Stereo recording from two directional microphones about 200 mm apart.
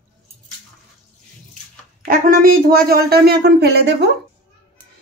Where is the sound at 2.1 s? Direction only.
45° right (ahead or behind).